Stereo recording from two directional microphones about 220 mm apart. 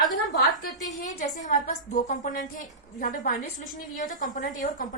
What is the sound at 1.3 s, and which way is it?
A woman's voice, 35° left (ahead or behind).